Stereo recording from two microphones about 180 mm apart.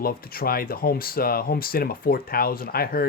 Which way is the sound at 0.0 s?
55° left (ahead or behind).